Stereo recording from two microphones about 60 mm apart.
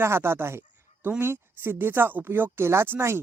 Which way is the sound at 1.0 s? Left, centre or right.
Right.